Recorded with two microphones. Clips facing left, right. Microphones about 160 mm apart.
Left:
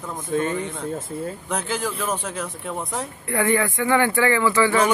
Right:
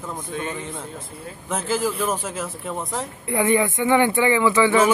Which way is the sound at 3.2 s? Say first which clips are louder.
Right 2 dB; 20° right (ahead or behind).